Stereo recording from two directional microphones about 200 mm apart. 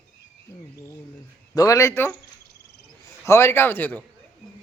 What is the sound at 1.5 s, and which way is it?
Speech, 15° left (ahead or behind).